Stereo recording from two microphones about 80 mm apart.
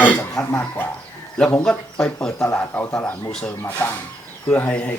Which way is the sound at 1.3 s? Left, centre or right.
Centre.